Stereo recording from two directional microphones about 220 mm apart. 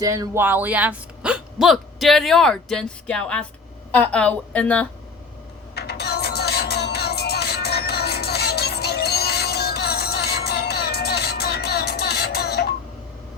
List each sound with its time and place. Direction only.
0.0 s speech: 15° right (ahead or behind); by 4.9 s 5° left (ahead or behind)
5.7 s music: 45° left (ahead or behind)